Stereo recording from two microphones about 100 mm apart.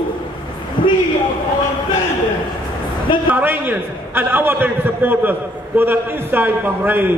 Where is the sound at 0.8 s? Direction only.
55° left (ahead or behind).